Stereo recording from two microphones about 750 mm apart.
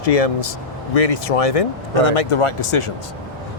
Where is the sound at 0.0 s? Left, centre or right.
Left.